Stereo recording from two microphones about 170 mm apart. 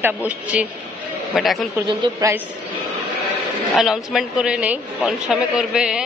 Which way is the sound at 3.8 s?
Centre (ahead or behind).